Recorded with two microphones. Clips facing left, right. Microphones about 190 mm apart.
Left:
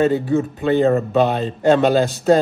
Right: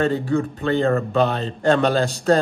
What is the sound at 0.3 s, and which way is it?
Speech, 20° left (ahead or behind).